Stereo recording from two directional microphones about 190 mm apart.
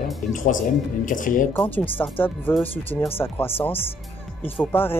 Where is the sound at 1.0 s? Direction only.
45° left (ahead or behind).